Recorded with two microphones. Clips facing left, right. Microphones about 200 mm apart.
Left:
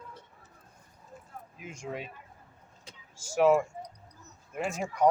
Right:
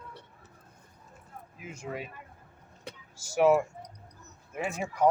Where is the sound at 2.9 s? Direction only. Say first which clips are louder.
Right 10 dB; 65° right (ahead or behind).